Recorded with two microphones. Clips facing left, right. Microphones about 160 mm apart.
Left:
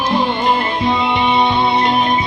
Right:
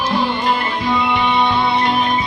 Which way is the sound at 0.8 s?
25° left (ahead or behind).